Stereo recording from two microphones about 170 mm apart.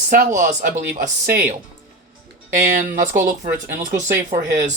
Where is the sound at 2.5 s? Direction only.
50° right (ahead or behind).